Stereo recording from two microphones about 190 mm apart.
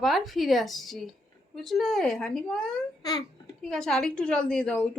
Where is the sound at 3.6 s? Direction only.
5° left (ahead or behind).